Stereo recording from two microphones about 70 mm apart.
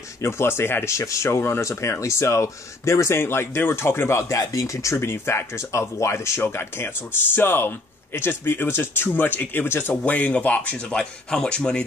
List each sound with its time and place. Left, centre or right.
0.2 s speech: left
4.9 s speech: left
10.0 s speech: left
11.0 s speech: centre